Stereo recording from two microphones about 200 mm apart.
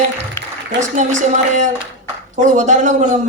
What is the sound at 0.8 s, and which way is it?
Music, 40° right (ahead or behind).